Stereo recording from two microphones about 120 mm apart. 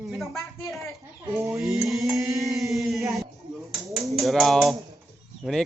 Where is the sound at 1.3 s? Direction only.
25° right (ahead or behind).